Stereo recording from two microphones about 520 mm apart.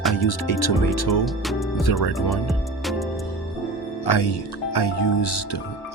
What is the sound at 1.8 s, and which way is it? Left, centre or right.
Speech, left.